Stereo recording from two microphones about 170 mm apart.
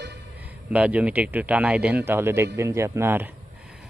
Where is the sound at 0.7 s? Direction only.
5° right (ahead or behind).